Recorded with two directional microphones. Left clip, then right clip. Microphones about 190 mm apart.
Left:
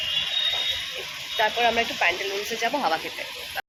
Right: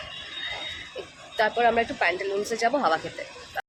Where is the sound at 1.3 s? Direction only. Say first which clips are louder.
Even; 35° right (ahead or behind).